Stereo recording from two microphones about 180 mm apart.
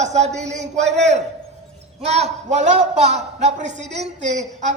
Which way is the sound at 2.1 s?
35° right (ahead or behind).